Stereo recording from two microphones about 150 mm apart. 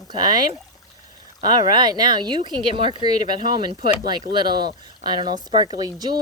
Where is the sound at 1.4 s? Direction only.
30° right (ahead or behind).